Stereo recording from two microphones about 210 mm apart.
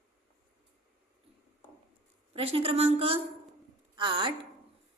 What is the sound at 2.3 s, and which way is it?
A woman's voice, 30° right (ahead or behind).